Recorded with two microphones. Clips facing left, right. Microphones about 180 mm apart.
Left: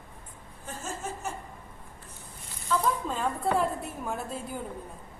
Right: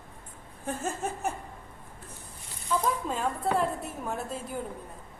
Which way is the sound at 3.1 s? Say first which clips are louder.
Even; 5° right (ahead or behind).